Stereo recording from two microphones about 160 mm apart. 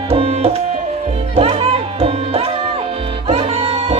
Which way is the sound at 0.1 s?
40° right (ahead or behind).